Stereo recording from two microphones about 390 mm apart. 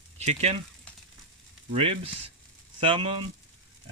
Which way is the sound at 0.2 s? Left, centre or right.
Centre.